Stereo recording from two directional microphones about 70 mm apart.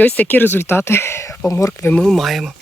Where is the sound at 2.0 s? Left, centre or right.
Centre.